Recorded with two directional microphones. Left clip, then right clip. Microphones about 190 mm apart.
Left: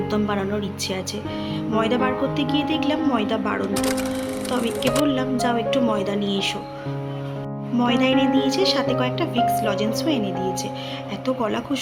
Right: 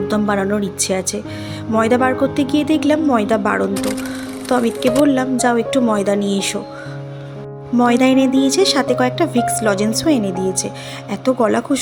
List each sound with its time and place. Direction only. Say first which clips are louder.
0.1 s speech: right 7 dB; 40° right (ahead or behind)
3.8 s speech: right 1 dB; centre (ahead or behind)
4.5 s speech: right 7 dB; 40° right (ahead or behind)
7.8 s speech: right 6 dB; 45° right (ahead or behind)